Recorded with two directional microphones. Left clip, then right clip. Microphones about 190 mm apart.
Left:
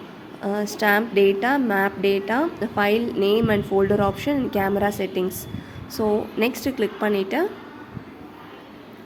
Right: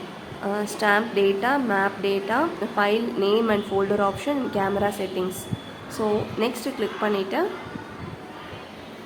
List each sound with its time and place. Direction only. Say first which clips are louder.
0.4 s a woman's voice: left 1 dB; 30° left (ahead or behind)